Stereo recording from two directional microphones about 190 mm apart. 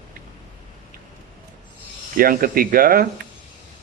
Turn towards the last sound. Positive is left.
turn(degrees=-50)  # may be behind; listen again after turning